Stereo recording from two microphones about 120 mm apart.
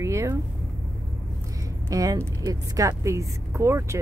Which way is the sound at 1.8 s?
30° right (ahead or behind).